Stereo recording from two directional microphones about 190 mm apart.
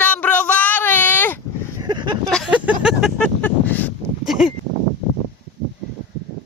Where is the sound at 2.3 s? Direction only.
5° right (ahead or behind).